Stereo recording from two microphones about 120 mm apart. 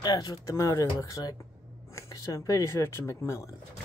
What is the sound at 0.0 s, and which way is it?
Speech, 35° left (ahead or behind).